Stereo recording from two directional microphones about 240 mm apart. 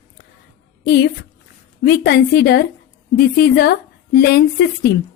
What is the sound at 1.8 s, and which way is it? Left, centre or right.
A woman's voice, left.